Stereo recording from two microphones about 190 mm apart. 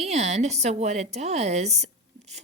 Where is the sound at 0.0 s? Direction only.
35° right (ahead or behind).